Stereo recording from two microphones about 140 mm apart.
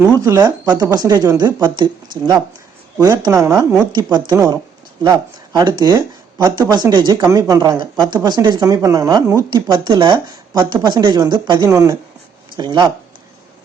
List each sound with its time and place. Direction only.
0.2 s speech: 25° right (ahead or behind)